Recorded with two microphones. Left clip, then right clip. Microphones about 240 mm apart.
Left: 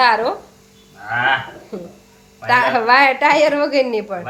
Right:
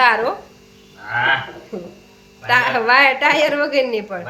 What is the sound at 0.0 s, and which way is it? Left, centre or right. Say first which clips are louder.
Speech: even; centre.